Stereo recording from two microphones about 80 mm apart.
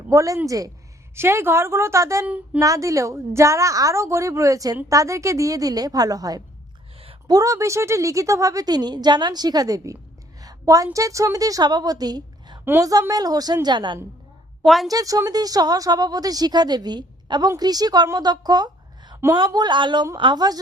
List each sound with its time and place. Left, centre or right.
0.1 s a woman's voice: right
1.1 s a woman's voice: right
2.2 s speech: centre
2.6 s a woman's voice: right
10.4 s a sound: right
10.9 s a woman's voice: right
14.6 s a woman's voice: centre
14.8 s a woman's voice: right
19.5 s a woman's voice: right